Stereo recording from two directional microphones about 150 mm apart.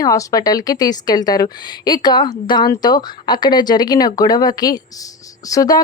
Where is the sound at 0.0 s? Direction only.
20° left (ahead or behind).